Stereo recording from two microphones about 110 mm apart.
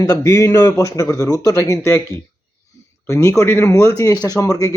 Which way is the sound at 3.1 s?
30° left (ahead or behind).